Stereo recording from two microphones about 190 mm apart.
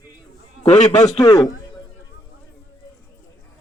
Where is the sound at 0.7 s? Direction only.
40° left (ahead or behind).